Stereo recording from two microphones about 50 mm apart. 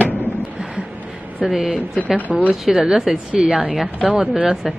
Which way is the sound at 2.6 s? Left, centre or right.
Centre.